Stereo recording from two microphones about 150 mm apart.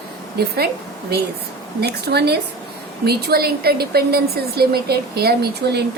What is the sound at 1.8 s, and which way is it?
A woman's voice, 90° right.